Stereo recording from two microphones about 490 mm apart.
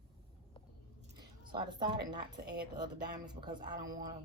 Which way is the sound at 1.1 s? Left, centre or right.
Centre.